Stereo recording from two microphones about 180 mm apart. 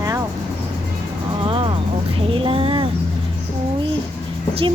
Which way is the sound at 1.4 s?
30° right (ahead or behind).